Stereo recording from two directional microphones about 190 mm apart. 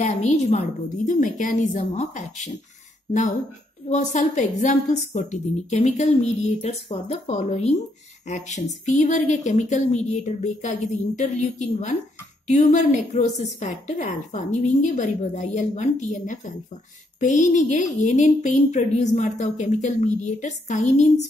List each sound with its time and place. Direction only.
0.0 s a woman's voice: 35° left (ahead or behind)